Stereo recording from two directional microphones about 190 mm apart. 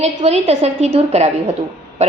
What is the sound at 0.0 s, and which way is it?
A woman's voice, 30° right (ahead or behind).